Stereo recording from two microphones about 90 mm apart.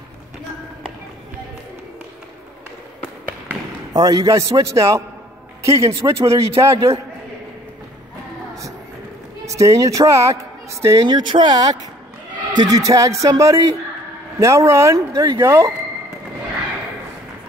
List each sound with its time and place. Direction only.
3.9 s a man's voice: 45° right (ahead or behind); by 7.0 s 30° right (ahead or behind)
9.5 s speech: 35° right (ahead or behind)
11.1 s speech: 60° right (ahead or behind); by 15.7 s 30° right (ahead or behind)